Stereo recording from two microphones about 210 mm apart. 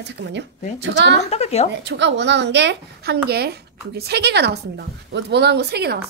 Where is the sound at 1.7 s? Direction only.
55° right (ahead or behind).